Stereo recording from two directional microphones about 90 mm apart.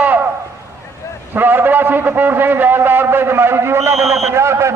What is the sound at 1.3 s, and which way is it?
A man's voice, 20° right (ahead or behind).